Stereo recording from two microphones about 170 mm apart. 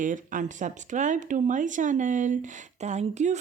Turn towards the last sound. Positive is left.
turn(degrees=-40)  # may be behind; listen again after turning